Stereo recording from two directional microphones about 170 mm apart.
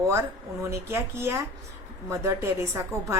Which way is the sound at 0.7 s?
15° right (ahead or behind).